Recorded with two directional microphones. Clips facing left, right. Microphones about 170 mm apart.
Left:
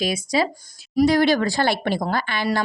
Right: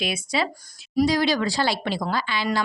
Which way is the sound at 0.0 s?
40° left (ahead or behind).